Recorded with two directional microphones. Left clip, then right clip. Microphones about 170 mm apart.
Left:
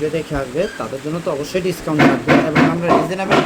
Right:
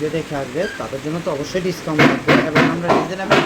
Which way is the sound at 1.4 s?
35° left (ahead or behind).